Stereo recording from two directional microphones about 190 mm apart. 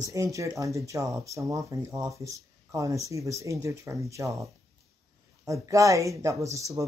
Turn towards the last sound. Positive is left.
turn(degrees=-15)  # may be behind; listen again after turning